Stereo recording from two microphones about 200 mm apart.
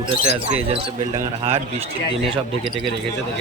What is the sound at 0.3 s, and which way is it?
Speech, 30° right (ahead or behind).